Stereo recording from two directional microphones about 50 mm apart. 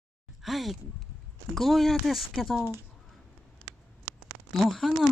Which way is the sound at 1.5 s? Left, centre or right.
Centre.